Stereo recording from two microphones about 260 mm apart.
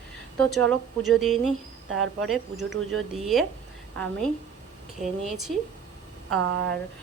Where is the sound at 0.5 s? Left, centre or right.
Centre.